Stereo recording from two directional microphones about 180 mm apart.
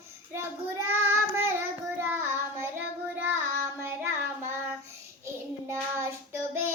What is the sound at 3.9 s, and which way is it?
Child singing, 15° right (ahead or behind).